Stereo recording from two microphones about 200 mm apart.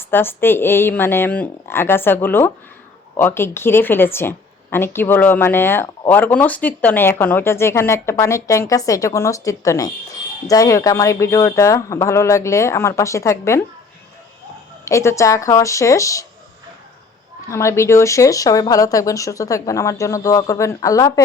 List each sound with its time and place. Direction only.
0.0 s speech: 10° left (ahead or behind)
14.8 s speech: 15° left (ahead or behind)
17.5 s speech: 15° left (ahead or behind)